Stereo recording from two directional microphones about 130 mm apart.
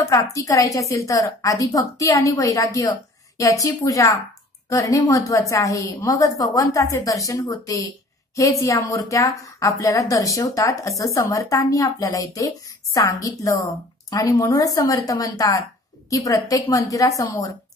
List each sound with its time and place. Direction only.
0.0 s a woman's voice: 25° left (ahead or behind)